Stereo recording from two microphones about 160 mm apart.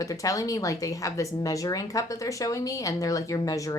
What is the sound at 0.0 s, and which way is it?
A woman's voice, 20° left (ahead or behind).